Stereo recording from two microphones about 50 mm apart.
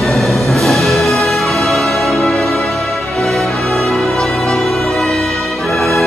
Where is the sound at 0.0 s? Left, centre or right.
Centre.